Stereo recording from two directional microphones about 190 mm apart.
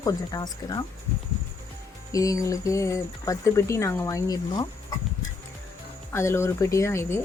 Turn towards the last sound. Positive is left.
turn(degrees=15)  # may be behind; listen again after turning